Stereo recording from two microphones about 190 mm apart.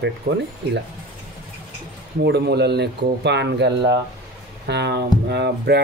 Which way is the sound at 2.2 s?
60° right (ahead or behind).